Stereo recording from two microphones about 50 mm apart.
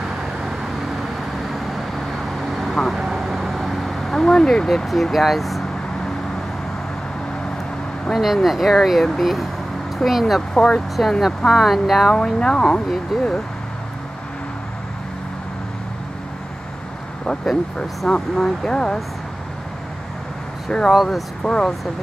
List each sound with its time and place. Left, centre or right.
1.5 s vehicle: centre
5.1 s speech: centre
8.1 s speech: centre
10.5 s speech: centre
11.0 s speech: centre
12.1 s speech: centre
13.1 s speech: centre
17.7 s speech: centre
20.9 s speech: centre
21.4 s speech: centre